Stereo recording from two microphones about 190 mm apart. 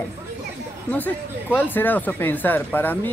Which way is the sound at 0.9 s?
10° left (ahead or behind).